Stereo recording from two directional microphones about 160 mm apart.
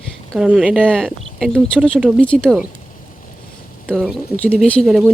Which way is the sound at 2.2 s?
5° left (ahead or behind).